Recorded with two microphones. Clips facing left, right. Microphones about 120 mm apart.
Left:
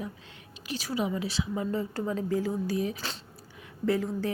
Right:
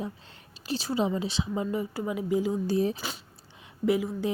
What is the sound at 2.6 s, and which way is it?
Speech, 30° right (ahead or behind).